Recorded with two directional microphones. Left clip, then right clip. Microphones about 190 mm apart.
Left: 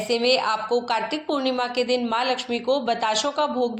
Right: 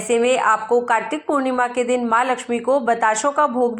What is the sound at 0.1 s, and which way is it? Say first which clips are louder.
A woman's voice: right 5 dB; 20° right (ahead or behind).